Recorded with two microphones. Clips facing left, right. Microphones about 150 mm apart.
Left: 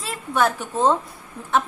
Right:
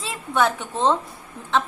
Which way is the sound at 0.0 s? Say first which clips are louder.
Even; centre (ahead or behind).